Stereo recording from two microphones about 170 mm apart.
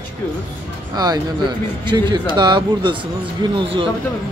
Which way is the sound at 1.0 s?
25° right (ahead or behind).